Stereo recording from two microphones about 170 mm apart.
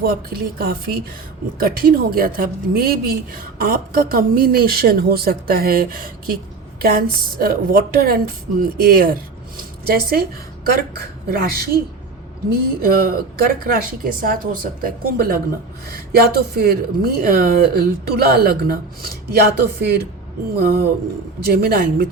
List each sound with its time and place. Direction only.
0.0 s a woman's voice: 60° right (ahead or behind)